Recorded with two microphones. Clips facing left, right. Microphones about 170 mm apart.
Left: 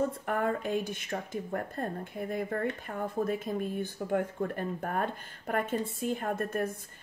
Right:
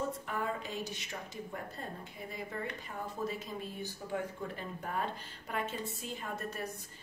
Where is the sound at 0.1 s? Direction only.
55° left (ahead or behind).